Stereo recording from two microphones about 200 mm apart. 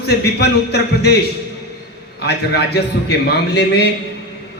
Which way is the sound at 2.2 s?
55° left (ahead or behind).